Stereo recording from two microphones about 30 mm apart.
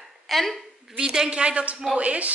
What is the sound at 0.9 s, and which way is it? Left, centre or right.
Speech, right.